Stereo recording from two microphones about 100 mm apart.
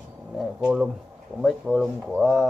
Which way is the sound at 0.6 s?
10° right (ahead or behind).